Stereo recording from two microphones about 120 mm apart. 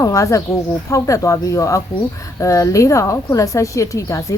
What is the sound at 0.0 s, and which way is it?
Speech, 25° left (ahead or behind).